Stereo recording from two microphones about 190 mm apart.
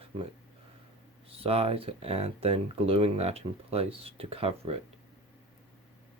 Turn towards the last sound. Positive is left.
turn(degrees=-30)  # may be behind; listen again after turning